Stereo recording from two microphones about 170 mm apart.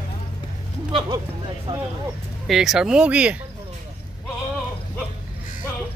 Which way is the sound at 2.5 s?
Centre (ahead or behind).